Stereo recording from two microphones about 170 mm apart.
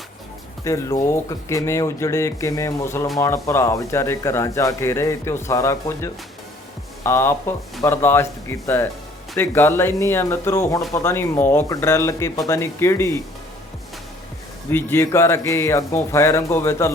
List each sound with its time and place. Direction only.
0.6 s speech: 20° left (ahead or behind)
14.7 s speech: 15° left (ahead or behind)